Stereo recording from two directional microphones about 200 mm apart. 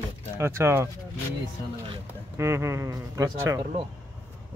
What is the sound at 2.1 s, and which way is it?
Speech, 15° right (ahead or behind).